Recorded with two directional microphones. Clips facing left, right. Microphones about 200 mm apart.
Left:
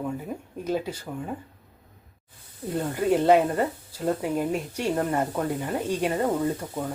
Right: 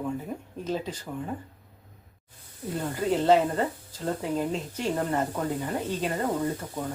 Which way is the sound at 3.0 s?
15° left (ahead or behind).